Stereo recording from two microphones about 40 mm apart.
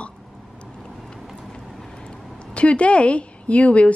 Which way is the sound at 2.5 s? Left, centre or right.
Left.